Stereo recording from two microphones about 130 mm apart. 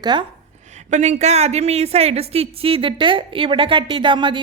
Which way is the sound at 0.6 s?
65° right (ahead or behind).